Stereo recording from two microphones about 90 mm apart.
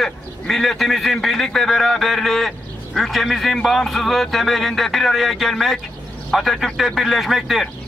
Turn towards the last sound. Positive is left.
turn(degrees=0)  # may be behind; listen again after turning